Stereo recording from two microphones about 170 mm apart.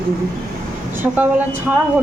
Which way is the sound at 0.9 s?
10° right (ahead or behind).